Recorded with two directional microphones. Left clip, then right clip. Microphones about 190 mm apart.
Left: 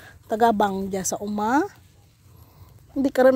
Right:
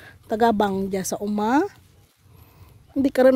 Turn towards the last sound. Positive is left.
turn(degrees=-35)  # may be behind; listen again after turning